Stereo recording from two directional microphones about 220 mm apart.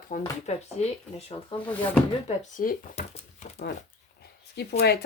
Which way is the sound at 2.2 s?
35° left (ahead or behind).